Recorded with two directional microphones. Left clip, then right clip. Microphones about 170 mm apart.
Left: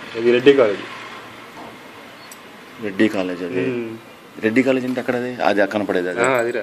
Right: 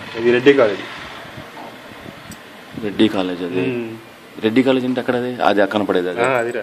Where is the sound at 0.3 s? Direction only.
25° right (ahead or behind).